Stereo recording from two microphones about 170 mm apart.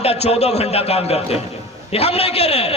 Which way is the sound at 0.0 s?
35° left (ahead or behind).